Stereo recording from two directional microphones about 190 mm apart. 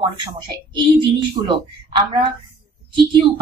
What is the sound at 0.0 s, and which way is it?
Speech, 25° right (ahead or behind).